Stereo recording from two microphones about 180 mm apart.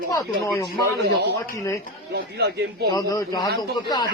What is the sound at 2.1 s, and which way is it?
Speech, 65° right (ahead or behind).